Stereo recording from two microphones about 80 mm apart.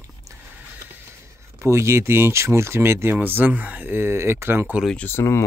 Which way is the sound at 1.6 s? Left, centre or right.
Right.